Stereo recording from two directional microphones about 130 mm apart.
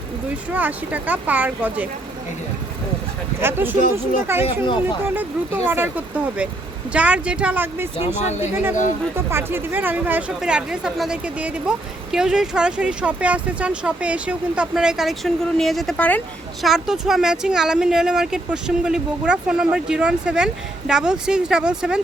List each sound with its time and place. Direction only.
0.5 s speech: 10° right (ahead or behind)
3.4 s speech: 15° right (ahead or behind)
5.6 s speech: 15° right (ahead or behind)
7.9 s speech: 55° left (ahead or behind)
8.4 s speech: 15° right (ahead or behind)